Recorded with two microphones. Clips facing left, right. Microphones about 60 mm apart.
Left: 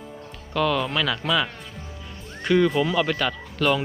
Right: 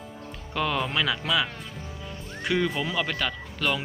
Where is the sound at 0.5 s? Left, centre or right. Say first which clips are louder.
Left 4 dB; centre.